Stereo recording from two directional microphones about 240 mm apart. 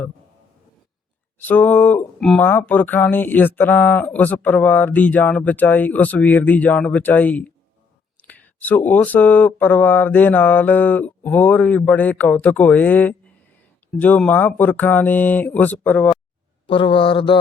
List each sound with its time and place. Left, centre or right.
1.4 s speech: centre
16.6 s speech: left